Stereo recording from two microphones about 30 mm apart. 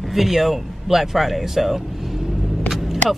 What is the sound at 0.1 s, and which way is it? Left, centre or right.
Speech, centre.